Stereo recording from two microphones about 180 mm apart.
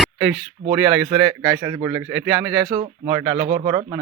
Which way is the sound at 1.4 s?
25° right (ahead or behind).